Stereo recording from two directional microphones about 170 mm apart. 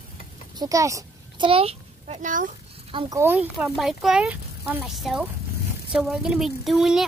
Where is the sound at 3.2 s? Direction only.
10° right (ahead or behind).